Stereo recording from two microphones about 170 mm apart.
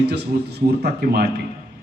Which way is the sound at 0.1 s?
75° right (ahead or behind).